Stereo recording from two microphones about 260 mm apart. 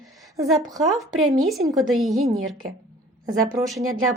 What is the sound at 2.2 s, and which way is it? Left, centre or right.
Speech, right.